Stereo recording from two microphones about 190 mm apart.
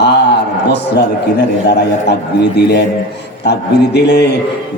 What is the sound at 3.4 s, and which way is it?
Speech, 65° left (ahead or behind).